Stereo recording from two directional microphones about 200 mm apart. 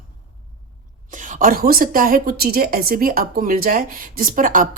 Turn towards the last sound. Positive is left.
turn(degrees=-40)  # may be behind; listen again after turning